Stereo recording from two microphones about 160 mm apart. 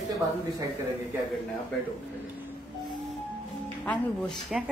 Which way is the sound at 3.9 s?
5° left (ahead or behind).